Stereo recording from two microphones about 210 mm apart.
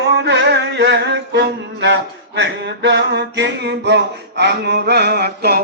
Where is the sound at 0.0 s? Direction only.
55° right (ahead or behind).